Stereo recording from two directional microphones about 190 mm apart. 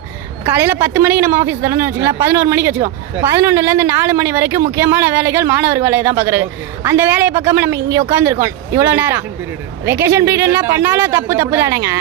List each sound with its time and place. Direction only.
0.4 s speech: 10° right (ahead or behind)